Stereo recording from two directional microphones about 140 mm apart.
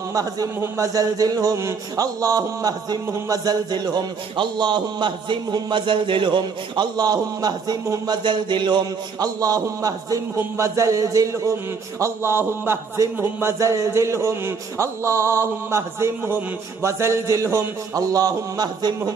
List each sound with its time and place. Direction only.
0.1 s a man's voice: 25° right (ahead or behind)